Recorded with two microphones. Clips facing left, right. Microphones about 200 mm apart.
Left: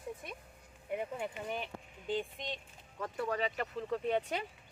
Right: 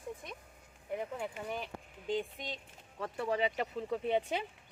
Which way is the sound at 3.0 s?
25° right (ahead or behind).